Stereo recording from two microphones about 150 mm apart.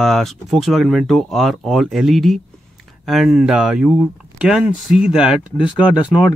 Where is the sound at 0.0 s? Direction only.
Centre (ahead or behind).